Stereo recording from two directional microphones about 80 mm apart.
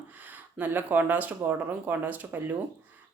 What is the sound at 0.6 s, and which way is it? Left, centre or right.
A woman's voice, right.